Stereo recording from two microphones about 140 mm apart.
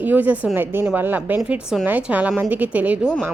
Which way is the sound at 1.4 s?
Centre (ahead or behind).